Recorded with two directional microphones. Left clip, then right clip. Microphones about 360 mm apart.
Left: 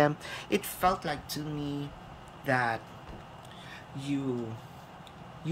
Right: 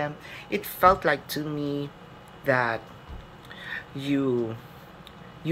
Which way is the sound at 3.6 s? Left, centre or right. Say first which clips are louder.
Right 10 dB; centre.